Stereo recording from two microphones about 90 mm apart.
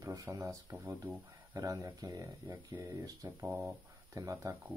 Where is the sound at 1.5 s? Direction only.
50° right (ahead or behind).